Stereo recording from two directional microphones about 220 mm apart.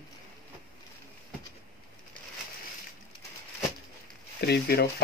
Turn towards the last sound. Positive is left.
turn(degrees=45)  # may be behind; listen again after turning